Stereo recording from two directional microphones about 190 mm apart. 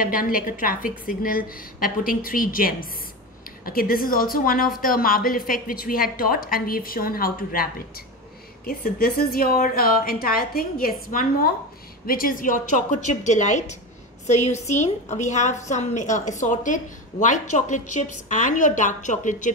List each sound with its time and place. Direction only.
0.0 s a woman's voice: 50° left (ahead or behind)